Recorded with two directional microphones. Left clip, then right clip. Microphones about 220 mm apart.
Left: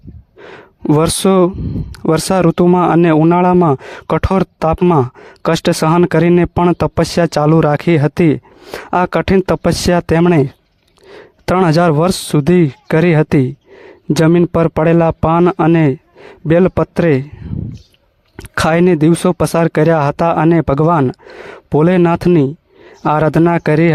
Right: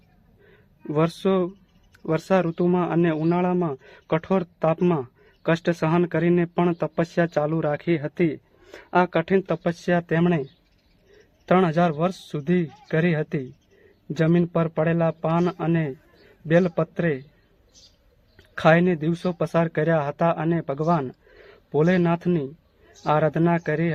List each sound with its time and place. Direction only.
0.4 s speech: 45° left (ahead or behind)
11.5 s speech: 50° left (ahead or behind)
18.3 s speech: 50° left (ahead or behind)